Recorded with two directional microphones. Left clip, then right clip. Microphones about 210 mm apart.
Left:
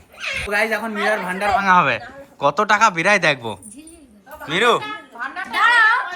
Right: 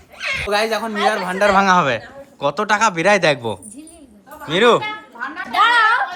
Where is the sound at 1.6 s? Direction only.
10° right (ahead or behind).